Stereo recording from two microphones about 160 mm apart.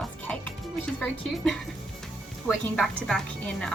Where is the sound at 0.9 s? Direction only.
5° left (ahead or behind).